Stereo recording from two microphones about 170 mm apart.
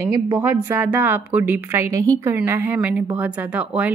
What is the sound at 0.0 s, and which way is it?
Speech, 15° right (ahead or behind).